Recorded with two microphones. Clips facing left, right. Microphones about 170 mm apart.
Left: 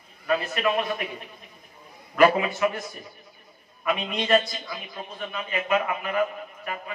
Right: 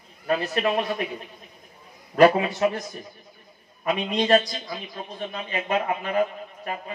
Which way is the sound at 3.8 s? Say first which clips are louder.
Right 3 dB; 40° right (ahead or behind).